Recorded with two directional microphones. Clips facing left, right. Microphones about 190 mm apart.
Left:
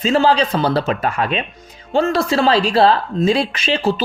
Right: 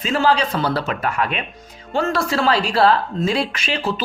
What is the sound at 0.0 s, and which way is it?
Speech, 25° left (ahead or behind).